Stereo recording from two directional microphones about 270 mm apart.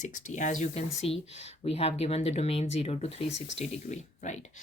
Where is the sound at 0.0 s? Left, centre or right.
Left.